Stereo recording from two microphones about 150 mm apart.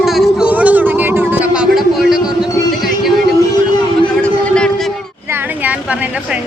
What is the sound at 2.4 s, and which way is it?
Music, centre (ahead or behind).